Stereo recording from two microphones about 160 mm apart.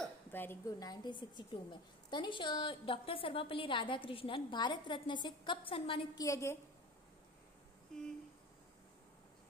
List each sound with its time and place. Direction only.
0.0 s a woman's voice: 15° left (ahead or behind); by 6.2 s 35° left (ahead or behind)
6.2 s a woman's voice: 20° left (ahead or behind)